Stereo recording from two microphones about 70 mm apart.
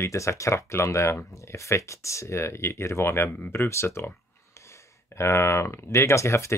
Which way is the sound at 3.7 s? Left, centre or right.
Left.